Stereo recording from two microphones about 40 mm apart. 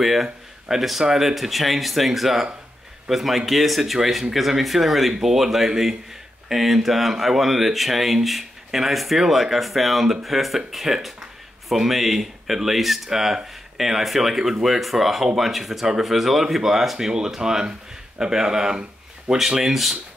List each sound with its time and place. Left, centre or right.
0.0 s speech: centre; by 19.3 s right
19.3 s speech: centre